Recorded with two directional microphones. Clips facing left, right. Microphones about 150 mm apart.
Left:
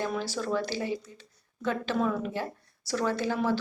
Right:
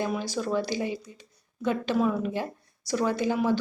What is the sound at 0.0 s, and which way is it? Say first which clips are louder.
A woman's voice: right 2 dB; 15° right (ahead or behind).